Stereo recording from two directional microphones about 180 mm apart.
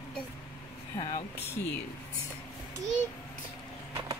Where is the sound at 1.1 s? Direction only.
60° left (ahead or behind).